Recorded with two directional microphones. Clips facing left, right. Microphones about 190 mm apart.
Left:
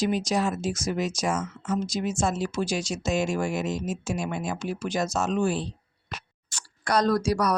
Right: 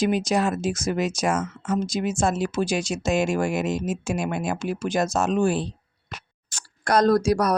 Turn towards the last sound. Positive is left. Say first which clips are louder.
# right 4 dB
turn(degrees=-50)  # may be behind; listen again after turning